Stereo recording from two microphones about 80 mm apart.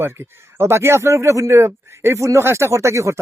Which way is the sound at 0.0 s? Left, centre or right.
Right.